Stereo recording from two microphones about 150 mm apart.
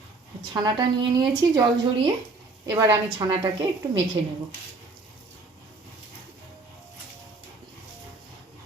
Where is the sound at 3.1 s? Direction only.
35° right (ahead or behind).